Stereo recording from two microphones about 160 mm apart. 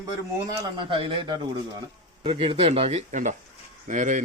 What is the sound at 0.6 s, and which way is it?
A man's voice, 30° right (ahead or behind).